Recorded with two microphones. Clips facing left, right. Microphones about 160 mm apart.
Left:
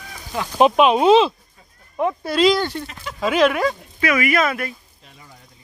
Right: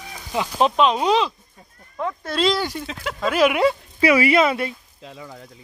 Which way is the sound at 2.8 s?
70° right (ahead or behind).